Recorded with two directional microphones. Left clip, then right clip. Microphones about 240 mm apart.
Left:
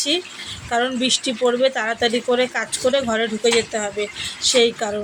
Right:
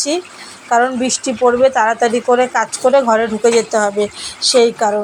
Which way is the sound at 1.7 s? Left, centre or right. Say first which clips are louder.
Right 7 dB; centre.